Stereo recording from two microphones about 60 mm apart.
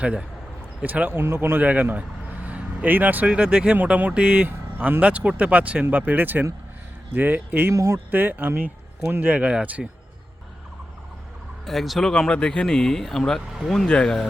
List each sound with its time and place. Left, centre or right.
0.0 s speech: centre
1.2 s speech: right
1.5 s speech: right
3.2 s speech: centre; by 7.7 s right
7.7 s speech: right
7.9 s speech: right
9.2 s speech: right
11.6 s speech: centre
12.3 s speech: centre
13.5 s speech: centre
13.8 s speech: centre